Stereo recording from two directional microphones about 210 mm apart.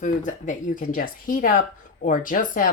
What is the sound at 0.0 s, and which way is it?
Speech, 35° left (ahead or behind).